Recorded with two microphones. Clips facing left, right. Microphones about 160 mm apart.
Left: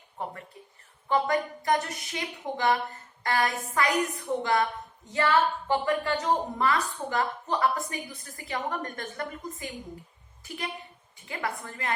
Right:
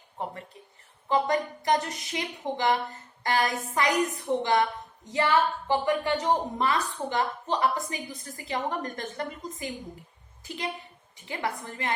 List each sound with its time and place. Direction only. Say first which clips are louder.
1.0 s a woman's voice: even; 25° right (ahead or behind)